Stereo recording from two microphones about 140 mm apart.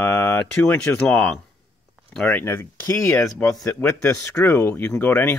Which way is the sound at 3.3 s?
5° left (ahead or behind).